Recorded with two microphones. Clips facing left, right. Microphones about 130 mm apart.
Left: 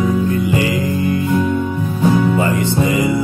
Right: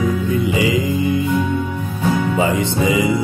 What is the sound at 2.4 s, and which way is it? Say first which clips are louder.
Music: left 1 dB; 15° right (ahead or behind).